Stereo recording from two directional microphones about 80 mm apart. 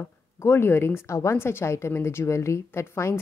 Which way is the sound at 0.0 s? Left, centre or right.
Left.